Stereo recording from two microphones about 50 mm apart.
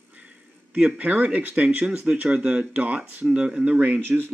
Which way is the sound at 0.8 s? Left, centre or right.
Right.